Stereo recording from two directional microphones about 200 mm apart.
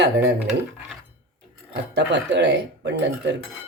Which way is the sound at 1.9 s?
60° right (ahead or behind).